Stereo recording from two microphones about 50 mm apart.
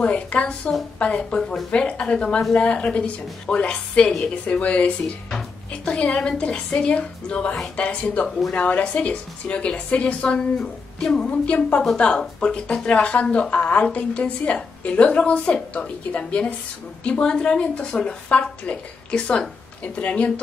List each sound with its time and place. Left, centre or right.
0.0 s a woman's voice: left
8.3 s speech: centre
8.5 s a woman's voice: left